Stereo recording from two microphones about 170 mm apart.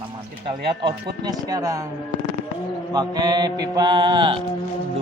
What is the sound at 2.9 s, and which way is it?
Mantra, 25° right (ahead or behind).